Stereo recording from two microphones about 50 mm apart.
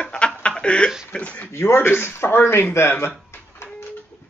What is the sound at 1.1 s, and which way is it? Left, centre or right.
Speech, left.